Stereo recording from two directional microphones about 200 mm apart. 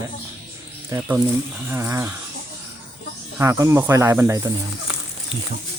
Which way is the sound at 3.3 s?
15° right (ahead or behind).